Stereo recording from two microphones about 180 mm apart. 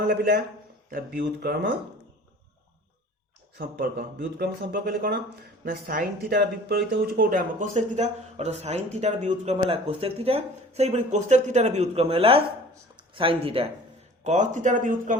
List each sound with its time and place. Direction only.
0.0 s speech: 55° right (ahead or behind)
3.6 s speech: 55° right (ahead or behind); by 13.7 s 30° right (ahead or behind)
14.3 s speech: 40° right (ahead or behind)